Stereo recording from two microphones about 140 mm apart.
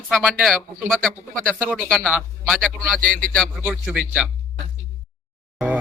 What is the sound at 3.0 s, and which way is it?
Speech, 80° right.